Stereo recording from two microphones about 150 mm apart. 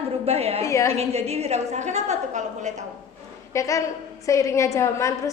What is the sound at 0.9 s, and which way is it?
A woman's voice, 45° right (ahead or behind).